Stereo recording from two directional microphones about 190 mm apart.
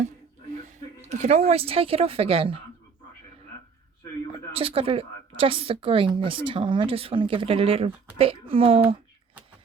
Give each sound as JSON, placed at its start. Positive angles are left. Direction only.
{"t": 1.0, "sound": "a woman's voice", "side_deg": -35}
{"t": 4.5, "sound": "a woman's voice", "side_deg": -30}